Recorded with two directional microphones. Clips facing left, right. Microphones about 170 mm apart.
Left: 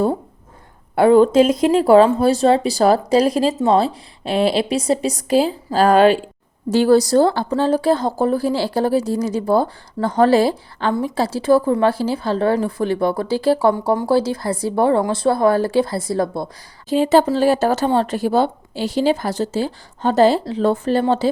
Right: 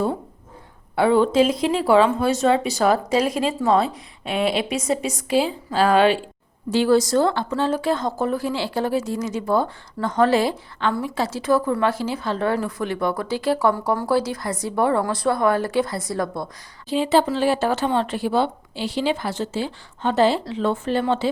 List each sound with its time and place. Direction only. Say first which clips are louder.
0.9 s speech: left 5 dB; 45° left (ahead or behind); by 16.5 s 30° left (ahead or behind)
16.9 s speech: left 4 dB; 45° left (ahead or behind)